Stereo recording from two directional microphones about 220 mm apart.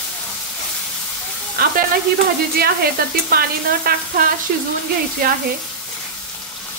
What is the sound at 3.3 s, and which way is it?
Speech, 45° right (ahead or behind).